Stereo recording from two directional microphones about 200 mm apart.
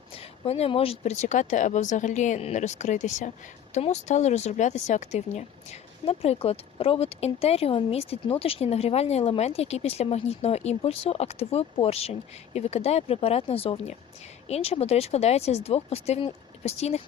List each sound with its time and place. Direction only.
0.2 s speech: 30° left (ahead or behind)